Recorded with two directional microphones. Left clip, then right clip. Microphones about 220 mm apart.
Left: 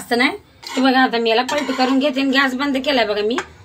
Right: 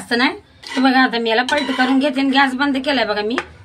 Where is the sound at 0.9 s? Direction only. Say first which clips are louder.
Even; 10° right (ahead or behind).